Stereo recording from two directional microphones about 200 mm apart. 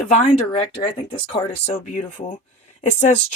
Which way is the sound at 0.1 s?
35° left (ahead or behind).